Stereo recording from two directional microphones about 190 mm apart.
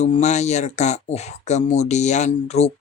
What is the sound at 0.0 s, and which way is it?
Speech, 35° left (ahead or behind).